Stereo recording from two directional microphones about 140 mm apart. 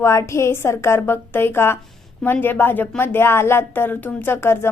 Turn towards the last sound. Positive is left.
turn(degrees=15)  # may be behind; listen again after turning